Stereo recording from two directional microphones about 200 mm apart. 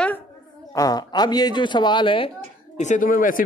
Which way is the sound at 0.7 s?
20° left (ahead or behind).